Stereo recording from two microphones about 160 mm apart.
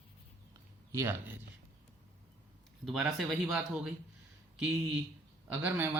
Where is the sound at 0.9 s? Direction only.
15° right (ahead or behind).